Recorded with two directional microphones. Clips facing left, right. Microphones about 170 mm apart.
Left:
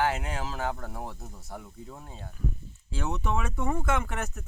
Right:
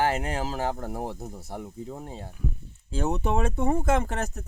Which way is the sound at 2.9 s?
45° right (ahead or behind).